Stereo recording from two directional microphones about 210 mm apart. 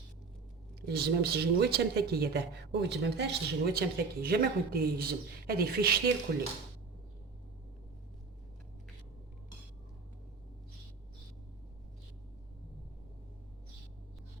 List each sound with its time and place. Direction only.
0.8 s speech: 50° right (ahead or behind)